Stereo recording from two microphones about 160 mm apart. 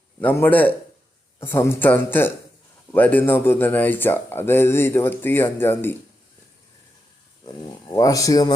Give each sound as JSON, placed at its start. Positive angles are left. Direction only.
{"t": 0.2, "sound": "speech", "side_deg": 10}
{"t": 7.9, "sound": "speech", "side_deg": 20}